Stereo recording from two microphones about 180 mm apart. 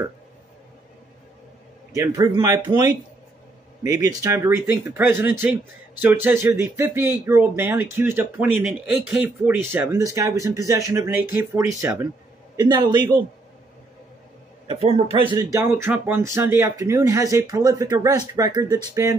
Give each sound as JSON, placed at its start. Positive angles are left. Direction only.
{"t": 2.0, "sound": "speech", "side_deg": -20}
{"t": 14.7, "sound": "speech", "side_deg": -35}
{"t": 15.3, "sound": "speech", "side_deg": -15}